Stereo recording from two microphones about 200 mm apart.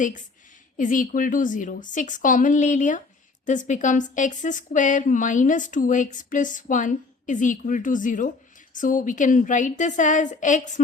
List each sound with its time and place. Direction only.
0.8 s a woman's voice: 40° left (ahead or behind)